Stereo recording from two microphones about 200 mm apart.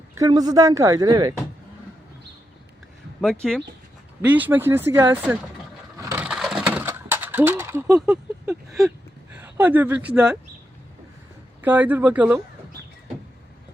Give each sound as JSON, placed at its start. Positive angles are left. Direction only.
{"t": 0.2, "sound": "speech", "side_deg": -20}
{"t": 3.4, "sound": "a sound", "side_deg": 0}
{"t": 4.3, "sound": "speech", "side_deg": -10}
{"t": 6.0, "sound": "a sound", "side_deg": -15}
{"t": 9.3, "sound": "speech", "side_deg": -10}
{"t": 11.6, "sound": "speech", "side_deg": -10}